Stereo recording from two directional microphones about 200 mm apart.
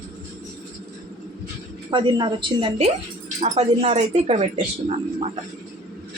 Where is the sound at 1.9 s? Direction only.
25° right (ahead or behind).